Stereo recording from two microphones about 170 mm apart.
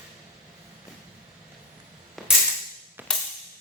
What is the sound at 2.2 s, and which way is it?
Music, centre (ahead or behind).